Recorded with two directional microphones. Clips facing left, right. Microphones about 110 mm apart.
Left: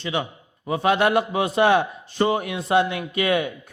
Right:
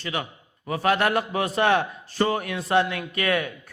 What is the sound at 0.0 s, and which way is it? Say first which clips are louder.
Speech: left 4 dB; 25° left (ahead or behind).